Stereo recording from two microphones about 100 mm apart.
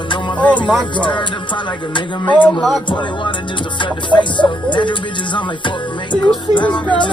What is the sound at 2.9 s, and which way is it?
Music, 55° left (ahead or behind).